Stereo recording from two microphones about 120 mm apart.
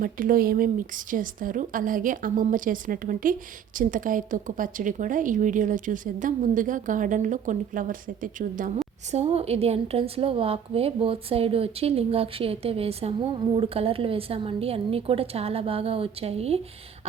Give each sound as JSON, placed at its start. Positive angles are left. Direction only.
{"t": 0.8, "sound": "speech", "side_deg": -90}
{"t": 9.1, "sound": "a woman's voice", "side_deg": -60}